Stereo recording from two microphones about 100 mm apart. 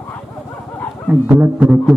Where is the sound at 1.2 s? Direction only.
20° right (ahead or behind).